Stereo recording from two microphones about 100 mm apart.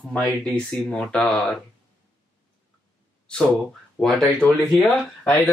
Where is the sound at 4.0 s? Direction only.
10° left (ahead or behind).